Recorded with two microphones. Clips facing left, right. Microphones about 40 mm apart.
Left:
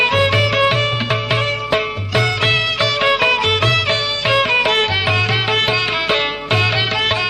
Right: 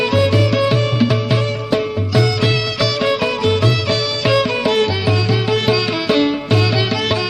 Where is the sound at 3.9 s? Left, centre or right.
Left.